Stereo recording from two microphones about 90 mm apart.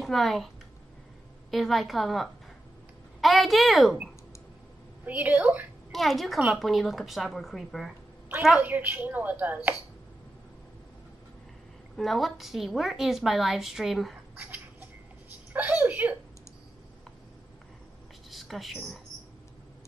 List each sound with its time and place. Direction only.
0.0 s a child's voice: centre (ahead or behind)
1.5 s a woman's voice: centre (ahead or behind)
5.0 s speech: 20° right (ahead or behind)
5.9 s a woman's voice: centre (ahead or behind)
8.5 s speech: 20° right (ahead or behind)
12.0 s a woman's voice: centre (ahead or behind)
14.3 s a sound: 20° right (ahead or behind)
18.3 s a sound: centre (ahead or behind)